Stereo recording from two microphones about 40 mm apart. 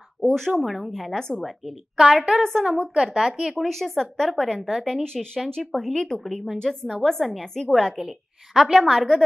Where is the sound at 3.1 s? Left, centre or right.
Centre.